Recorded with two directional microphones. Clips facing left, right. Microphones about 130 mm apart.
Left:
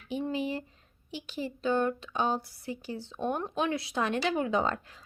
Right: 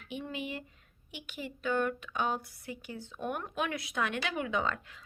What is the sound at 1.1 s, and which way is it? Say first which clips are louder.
Speech: left 6 dB; 30° left (ahead or behind).